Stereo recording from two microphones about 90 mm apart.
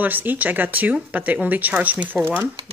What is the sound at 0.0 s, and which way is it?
Speech, 20° right (ahead or behind).